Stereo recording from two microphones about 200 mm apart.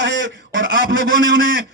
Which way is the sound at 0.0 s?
65° right (ahead or behind).